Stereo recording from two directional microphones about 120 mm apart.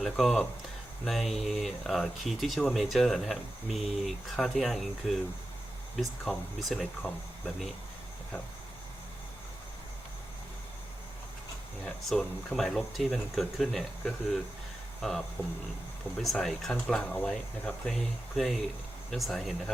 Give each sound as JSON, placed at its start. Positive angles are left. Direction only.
{"t": 0.0, "sound": "speech", "side_deg": 0}
{"t": 11.9, "sound": "speech", "side_deg": 5}
{"t": 15.4, "sound": "speech", "side_deg": 20}
{"t": 16.1, "sound": "speech", "side_deg": 0}